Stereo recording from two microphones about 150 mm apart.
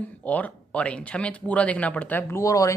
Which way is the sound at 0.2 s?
10° left (ahead or behind).